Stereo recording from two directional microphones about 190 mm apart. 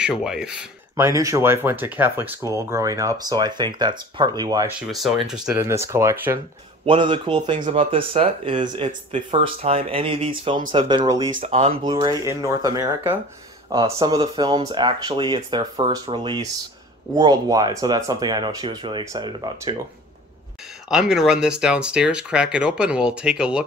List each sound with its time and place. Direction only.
0.0 s speech: 5° right (ahead or behind); by 4.7 s 20° right (ahead or behind)
4.7 s speech: centre (ahead or behind)
5.6 s speech: 15° right (ahead or behind)
6.9 s speech: 25° right (ahead or behind)
11.3 s speech: 40° right (ahead or behind)
11.8 s speech: 25° right (ahead or behind)
20.9 s speech: 5° right (ahead or behind)